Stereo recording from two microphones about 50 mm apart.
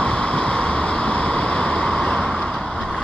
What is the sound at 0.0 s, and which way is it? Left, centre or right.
Vehicle, left.